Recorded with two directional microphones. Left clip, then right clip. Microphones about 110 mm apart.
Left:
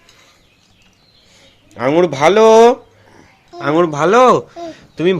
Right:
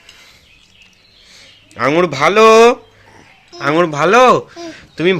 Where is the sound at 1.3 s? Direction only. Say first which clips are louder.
Right 3 dB; 10° left (ahead or behind).